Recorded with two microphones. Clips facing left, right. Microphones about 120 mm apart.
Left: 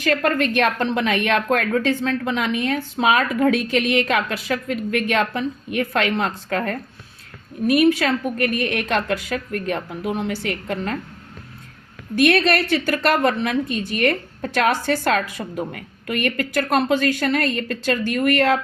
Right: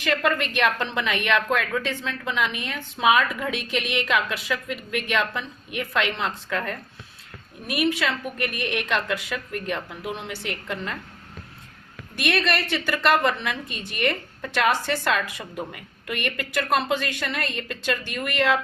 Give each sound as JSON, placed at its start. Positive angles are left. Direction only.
{"t": 0.0, "sound": "a woman's voice", "side_deg": 45}
{"t": 12.1, "sound": "a woman's voice", "side_deg": 45}